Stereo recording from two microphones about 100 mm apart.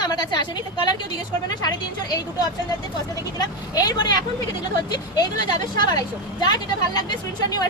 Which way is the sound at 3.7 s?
45° left (ahead or behind).